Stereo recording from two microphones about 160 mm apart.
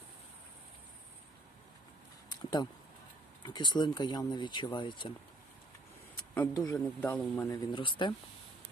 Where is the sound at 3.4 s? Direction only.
25° left (ahead or behind).